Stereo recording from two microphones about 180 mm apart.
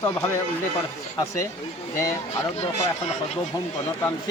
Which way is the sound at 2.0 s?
15° left (ahead or behind).